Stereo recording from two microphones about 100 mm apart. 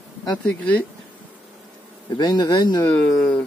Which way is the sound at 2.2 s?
45° left (ahead or behind).